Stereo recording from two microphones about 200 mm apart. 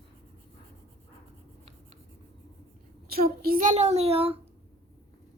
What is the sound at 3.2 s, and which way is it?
A child's voice, 45° right (ahead or behind).